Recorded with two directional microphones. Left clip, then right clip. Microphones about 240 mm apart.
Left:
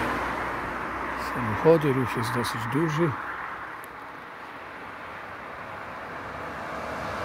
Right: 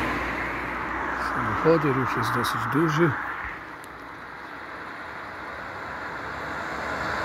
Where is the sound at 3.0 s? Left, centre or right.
Left.